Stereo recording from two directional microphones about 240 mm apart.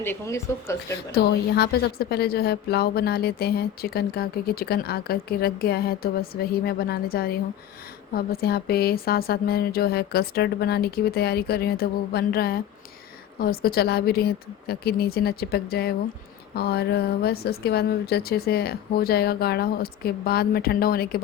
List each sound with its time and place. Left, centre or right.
0.0 s speech: centre
1.1 s a woman's voice: left